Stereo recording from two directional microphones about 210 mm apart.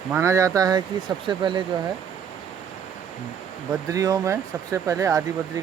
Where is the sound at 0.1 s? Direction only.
15° right (ahead or behind).